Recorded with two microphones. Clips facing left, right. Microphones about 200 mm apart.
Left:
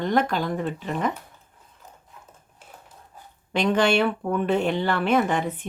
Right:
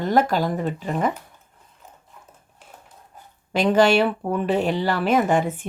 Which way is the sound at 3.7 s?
40° right (ahead or behind).